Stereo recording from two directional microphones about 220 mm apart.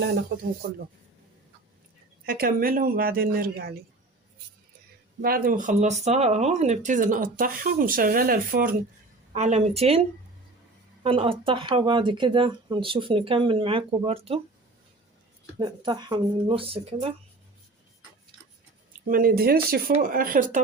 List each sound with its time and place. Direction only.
2.2 s speech: 40° right (ahead or behind)
5.2 s speech: 40° right (ahead or behind)
9.3 s speech: 30° right (ahead or behind)
11.0 s speech: 25° right (ahead or behind)
15.5 s speech: 20° right (ahead or behind)
19.0 s speech: 40° right (ahead or behind)